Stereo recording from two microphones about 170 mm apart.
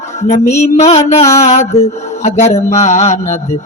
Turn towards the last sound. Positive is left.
turn(degrees=40)  # may be behind; listen again after turning